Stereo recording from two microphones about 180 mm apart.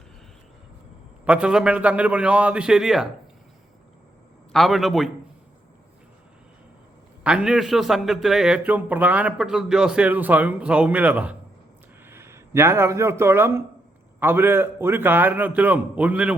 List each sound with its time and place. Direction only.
1.2 s a man's voice: 5° right (ahead or behind)
4.5 s a man's voice: centre (ahead or behind)
7.3 s a man's voice: 5° right (ahead or behind)